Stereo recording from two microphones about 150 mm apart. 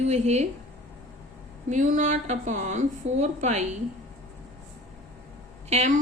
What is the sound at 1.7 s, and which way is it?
A woman's voice, 55° right (ahead or behind).